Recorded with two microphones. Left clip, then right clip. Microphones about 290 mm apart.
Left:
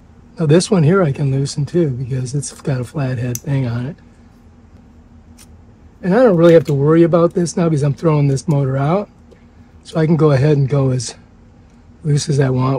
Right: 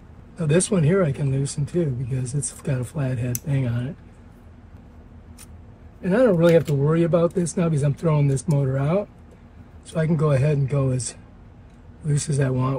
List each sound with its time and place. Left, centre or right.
0.4 s speech: left
6.0 s speech: left
12.1 s speech: left